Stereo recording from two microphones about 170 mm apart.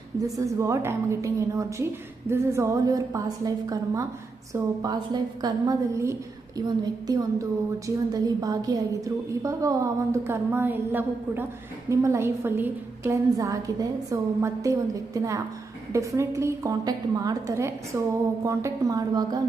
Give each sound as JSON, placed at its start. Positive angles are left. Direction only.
{"t": 0.2, "sound": "a woman's voice", "side_deg": -20}